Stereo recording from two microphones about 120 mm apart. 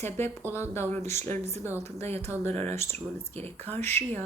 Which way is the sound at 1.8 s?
60° right (ahead or behind).